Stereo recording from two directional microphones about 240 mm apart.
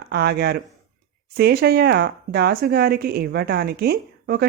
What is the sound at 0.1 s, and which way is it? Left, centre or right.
Speech, right.